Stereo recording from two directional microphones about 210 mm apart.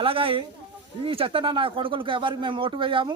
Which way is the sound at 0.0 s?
25° right (ahead or behind).